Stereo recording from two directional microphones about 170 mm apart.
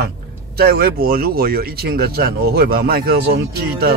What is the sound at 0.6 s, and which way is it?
Speech, 65° right (ahead or behind).